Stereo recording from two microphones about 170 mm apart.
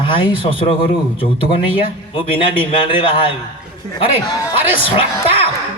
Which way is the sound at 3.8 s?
45° right (ahead or behind).